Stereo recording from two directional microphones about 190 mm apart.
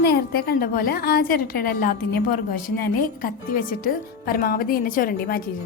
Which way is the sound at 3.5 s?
45° left (ahead or behind).